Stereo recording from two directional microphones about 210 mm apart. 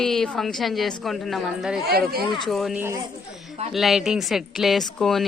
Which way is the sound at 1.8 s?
45° right (ahead or behind).